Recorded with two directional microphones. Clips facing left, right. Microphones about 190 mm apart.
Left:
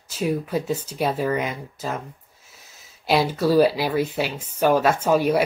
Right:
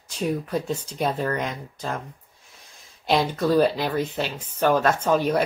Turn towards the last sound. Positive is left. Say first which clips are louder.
# left 2 dB
turn(degrees=10)  # may be behind; listen again after turning